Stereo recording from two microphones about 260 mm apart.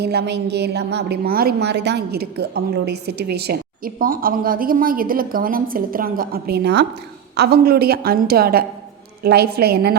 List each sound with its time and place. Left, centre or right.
0.0 s a woman's voice: right